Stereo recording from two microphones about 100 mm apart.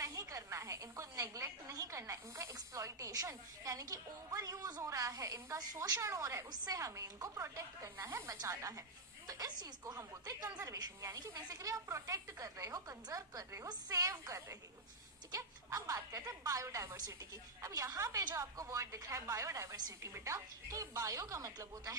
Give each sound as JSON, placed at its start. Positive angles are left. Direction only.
{"t": 0.0, "sound": "a woman's voice", "side_deg": -35}